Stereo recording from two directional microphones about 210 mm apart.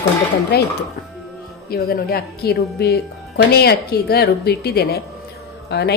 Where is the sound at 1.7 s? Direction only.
45° left (ahead or behind).